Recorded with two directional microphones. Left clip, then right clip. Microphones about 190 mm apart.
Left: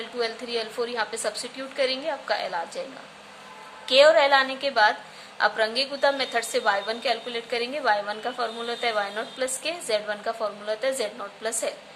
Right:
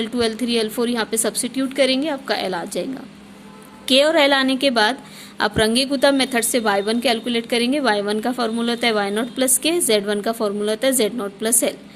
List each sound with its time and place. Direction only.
0.2 s a woman's voice: 55° right (ahead or behind)
3.8 s a woman's voice: 50° right (ahead or behind)